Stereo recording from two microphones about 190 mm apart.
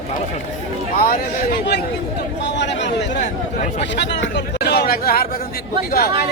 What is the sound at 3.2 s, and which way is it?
Speech, 40° left (ahead or behind).